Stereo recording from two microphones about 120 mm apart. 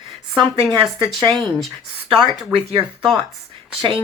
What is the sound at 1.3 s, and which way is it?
Speech, centre (ahead or behind).